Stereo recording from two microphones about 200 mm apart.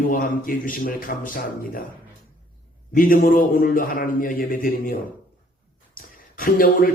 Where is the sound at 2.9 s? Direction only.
45° left (ahead or behind).